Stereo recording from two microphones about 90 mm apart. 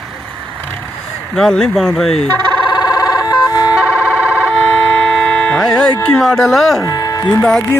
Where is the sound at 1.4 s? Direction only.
5° left (ahead or behind).